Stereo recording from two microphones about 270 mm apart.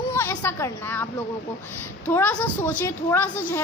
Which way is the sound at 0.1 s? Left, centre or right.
Centre.